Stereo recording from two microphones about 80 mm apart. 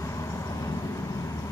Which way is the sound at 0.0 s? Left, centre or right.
Left.